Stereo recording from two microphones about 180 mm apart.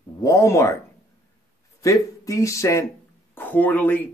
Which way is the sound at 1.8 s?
20° left (ahead or behind).